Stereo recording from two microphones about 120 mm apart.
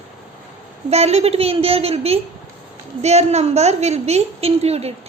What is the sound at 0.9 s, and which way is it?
A woman's voice, 60° right (ahead or behind).